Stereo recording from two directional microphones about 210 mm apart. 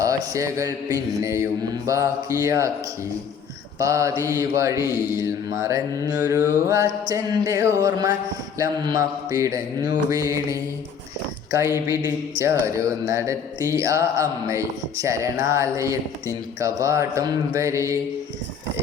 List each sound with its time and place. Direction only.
0.0 s speech: 15° right (ahead or behind)
3.8 s speech: 15° right (ahead or behind)
11.9 s speech: 10° right (ahead or behind)